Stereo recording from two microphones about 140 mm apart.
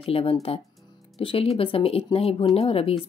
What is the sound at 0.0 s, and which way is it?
A woman's voice, 45° left (ahead or behind).